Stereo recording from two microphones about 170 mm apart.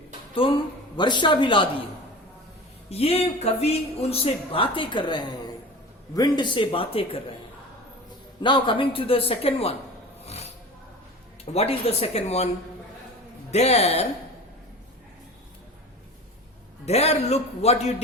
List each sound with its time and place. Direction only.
0.3 s a woman's voice: 30° left (ahead or behind)
2.9 s speech: 35° left (ahead or behind)
8.4 s speech: 30° left (ahead or behind)
10.2 s a sound: 40° left (ahead or behind)
11.5 s speech: 35° left (ahead or behind)
13.5 s speech: 40° left (ahead or behind)
16.8 s speech: 40° left (ahead or behind)